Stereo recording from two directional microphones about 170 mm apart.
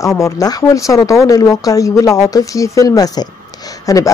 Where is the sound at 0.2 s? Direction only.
20° left (ahead or behind).